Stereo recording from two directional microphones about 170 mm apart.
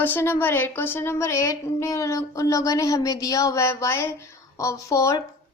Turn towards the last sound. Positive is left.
turn(degrees=20)  # may be behind; listen again after turning